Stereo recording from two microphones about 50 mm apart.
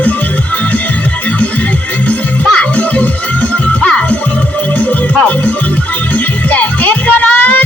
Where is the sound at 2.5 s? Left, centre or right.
Left.